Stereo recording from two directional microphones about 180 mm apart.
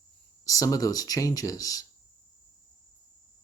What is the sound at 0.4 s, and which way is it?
Speech, 20° left (ahead or behind).